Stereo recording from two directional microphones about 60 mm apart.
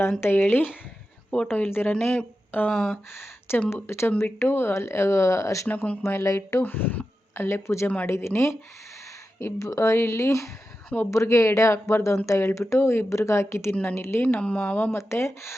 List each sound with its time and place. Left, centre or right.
0.2 s speech: left
2.7 s speech: centre
3.7 s speech: left
5.6 s speech: left
6.2 s speech: left
6.6 s speech: left
7.3 s speech: left
14.2 s speech: left
14.9 s speech: left